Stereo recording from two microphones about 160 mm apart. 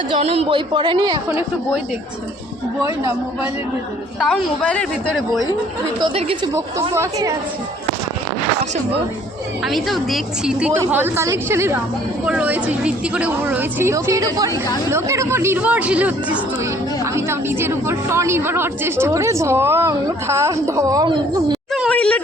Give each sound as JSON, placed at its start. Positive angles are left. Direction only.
{"t": 0.1, "sound": "a man's voice", "side_deg": -40}
{"t": 1.3, "sound": "a woman's voice", "side_deg": -10}
{"t": 4.2, "sound": "a woman's voice", "side_deg": 5}
{"t": 6.0, "sound": "a man's voice", "side_deg": -30}
{"t": 6.5, "sound": "speech", "side_deg": -20}
{"t": 9.6, "sound": "a woman's voice", "side_deg": 0}
{"t": 10.8, "sound": "a woman's voice", "side_deg": -15}
{"t": 21.7, "sound": "a sound", "side_deg": 5}